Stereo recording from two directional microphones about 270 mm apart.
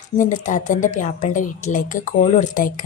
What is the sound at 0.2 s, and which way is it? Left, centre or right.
A woman's voice, left.